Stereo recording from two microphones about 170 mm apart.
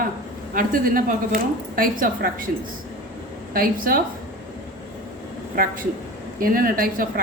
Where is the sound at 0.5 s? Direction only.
55° right (ahead or behind).